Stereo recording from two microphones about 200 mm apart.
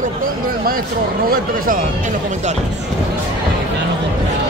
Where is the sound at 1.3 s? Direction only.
45° right (ahead or behind).